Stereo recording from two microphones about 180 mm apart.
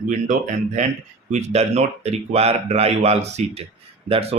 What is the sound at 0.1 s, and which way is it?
Speech, 45° right (ahead or behind).